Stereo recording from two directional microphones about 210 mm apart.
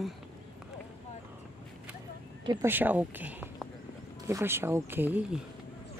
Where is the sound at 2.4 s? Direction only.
20° right (ahead or behind).